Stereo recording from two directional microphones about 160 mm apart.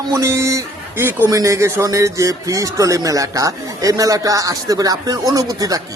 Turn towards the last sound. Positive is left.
turn(degrees=-20)  # may be behind; listen again after turning